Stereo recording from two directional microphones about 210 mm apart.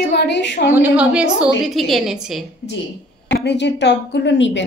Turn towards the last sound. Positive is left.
turn(degrees=60)  # may be behind; listen again after turning